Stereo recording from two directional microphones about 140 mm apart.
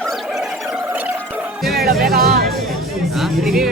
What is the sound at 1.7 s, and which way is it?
Speech, 90° right.